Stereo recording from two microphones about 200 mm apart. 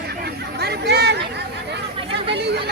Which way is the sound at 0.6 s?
55° right (ahead or behind).